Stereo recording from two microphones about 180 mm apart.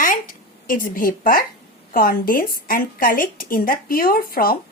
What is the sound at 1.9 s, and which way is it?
A woman's voice, 50° left (ahead or behind).